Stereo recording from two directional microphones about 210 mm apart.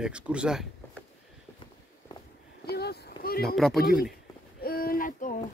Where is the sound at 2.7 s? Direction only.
50° left (ahead or behind).